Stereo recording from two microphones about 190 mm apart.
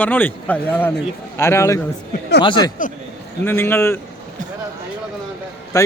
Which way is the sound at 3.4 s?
10° left (ahead or behind).